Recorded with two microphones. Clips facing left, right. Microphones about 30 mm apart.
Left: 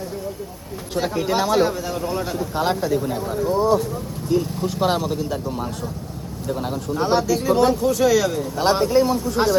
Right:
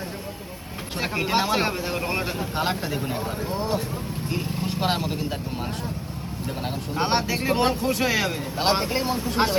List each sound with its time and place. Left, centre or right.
0.9 s a man's voice: right
4.8 s speech: right
6.9 s a man's voice: right